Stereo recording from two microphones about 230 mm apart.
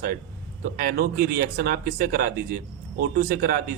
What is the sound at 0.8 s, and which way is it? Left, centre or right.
Speech, right.